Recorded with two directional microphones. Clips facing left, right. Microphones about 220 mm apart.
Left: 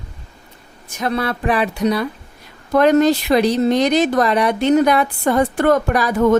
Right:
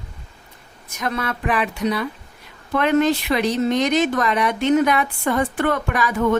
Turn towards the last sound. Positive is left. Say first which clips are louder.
# left 5 dB
turn(degrees=40)  # may be behind; listen again after turning